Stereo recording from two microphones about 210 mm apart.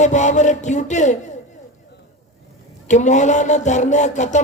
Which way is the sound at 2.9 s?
35° left (ahead or behind).